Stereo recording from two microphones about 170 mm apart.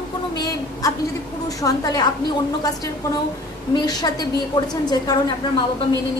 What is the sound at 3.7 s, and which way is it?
A woman's voice, 25° left (ahead or behind).